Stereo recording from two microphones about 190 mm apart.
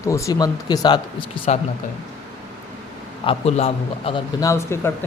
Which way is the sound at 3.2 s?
30° left (ahead or behind).